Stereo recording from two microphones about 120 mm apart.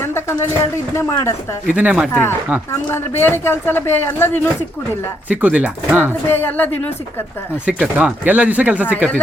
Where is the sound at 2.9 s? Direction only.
20° left (ahead or behind).